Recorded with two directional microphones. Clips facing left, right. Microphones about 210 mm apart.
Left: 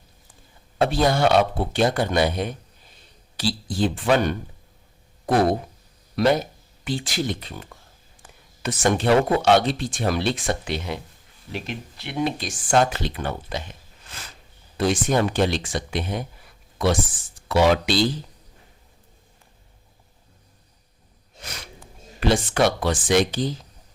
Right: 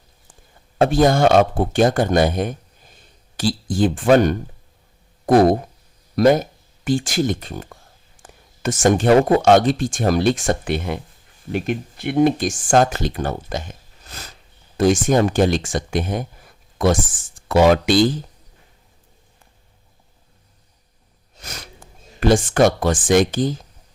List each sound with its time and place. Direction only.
0.8 s speech: 45° right (ahead or behind)
21.4 s speech: 45° right (ahead or behind)